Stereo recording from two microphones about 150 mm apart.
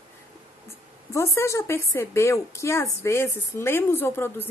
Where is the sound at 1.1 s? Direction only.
20° left (ahead or behind).